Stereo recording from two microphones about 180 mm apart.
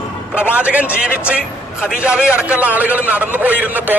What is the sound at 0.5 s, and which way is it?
A man's voice, 10° right (ahead or behind).